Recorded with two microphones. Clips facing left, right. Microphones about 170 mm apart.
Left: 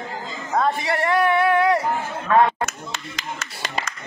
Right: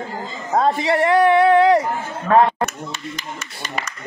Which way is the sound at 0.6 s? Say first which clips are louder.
Right 4 dB; 25° right (ahead or behind).